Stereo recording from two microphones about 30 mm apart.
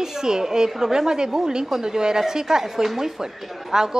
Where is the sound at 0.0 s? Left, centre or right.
Centre.